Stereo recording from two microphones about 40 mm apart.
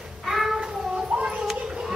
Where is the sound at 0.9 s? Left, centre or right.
Right.